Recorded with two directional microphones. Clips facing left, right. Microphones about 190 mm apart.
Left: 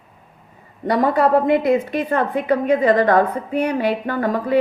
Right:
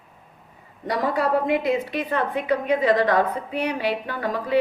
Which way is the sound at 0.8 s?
55° left (ahead or behind).